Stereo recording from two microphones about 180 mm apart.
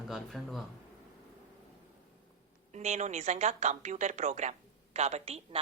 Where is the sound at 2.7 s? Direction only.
40° right (ahead or behind).